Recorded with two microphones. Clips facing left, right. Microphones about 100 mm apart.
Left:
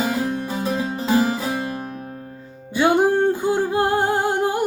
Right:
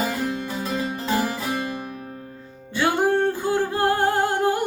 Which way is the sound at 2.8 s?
15° left (ahead or behind).